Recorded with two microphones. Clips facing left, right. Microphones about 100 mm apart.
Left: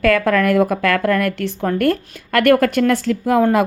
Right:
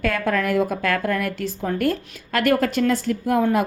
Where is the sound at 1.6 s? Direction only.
65° left (ahead or behind); by 3.6 s 90° left.